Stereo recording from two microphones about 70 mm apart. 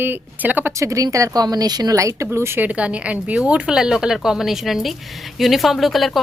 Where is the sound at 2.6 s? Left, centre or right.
Centre.